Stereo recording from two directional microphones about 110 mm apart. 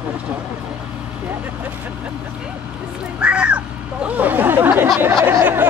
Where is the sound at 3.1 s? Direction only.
10° right (ahead or behind).